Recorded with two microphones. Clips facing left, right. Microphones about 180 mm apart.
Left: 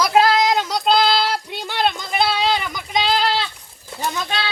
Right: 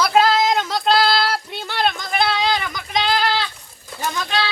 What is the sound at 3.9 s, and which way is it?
Speech, 20° left (ahead or behind).